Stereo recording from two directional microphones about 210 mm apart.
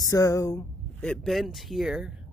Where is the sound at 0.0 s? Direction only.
15° left (ahead or behind).